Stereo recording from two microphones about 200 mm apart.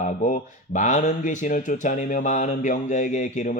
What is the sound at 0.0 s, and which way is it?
A man's voice, 40° left (ahead or behind).